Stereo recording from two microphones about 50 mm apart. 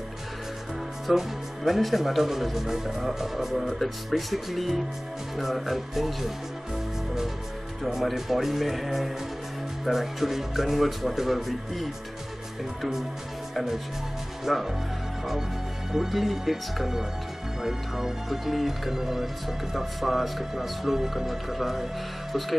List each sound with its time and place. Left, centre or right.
1.0 s speech: centre
7.8 s speech: centre
14.4 s speech: centre
15.9 s speech: centre